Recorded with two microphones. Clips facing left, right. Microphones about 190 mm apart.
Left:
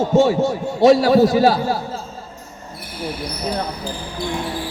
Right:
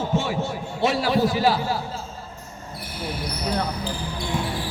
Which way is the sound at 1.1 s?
40° left (ahead or behind).